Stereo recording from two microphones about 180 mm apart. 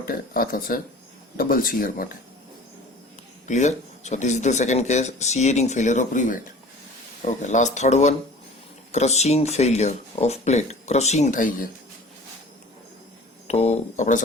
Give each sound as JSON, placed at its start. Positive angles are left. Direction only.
{"t": 0.0, "sound": "speech", "side_deg": 55}
{"t": 3.4, "sound": "speech", "side_deg": 40}
{"t": 7.4, "sound": "speech", "side_deg": 40}
{"t": 13.5, "sound": "speech", "side_deg": 35}